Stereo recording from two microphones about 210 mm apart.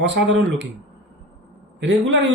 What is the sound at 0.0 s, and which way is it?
Speech, 65° right (ahead or behind).